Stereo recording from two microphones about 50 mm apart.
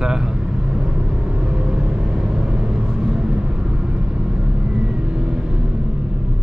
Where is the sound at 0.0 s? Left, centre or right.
Centre.